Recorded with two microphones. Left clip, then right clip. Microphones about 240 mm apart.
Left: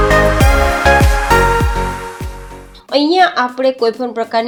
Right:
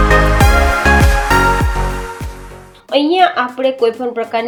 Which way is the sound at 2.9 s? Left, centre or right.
Left.